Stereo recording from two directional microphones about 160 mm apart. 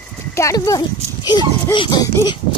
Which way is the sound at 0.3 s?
20° left (ahead or behind).